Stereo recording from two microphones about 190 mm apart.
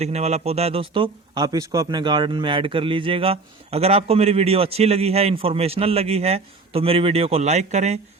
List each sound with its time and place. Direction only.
0.0 s speech: 35° right (ahead or behind)